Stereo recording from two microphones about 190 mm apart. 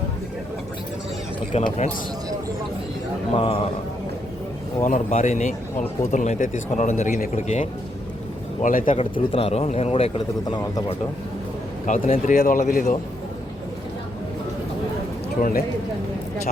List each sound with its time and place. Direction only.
1.5 s speech: 35° left (ahead or behind)
3.3 s speech: 30° left (ahead or behind)
4.8 s speech: 40° left (ahead or behind)
9.0 s speech: 30° left (ahead or behind)
11.9 s speech: 40° left (ahead or behind)
15.4 s speech: 45° left (ahead or behind)